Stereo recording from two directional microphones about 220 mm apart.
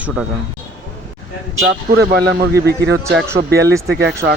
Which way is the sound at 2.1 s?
45° right (ahead or behind).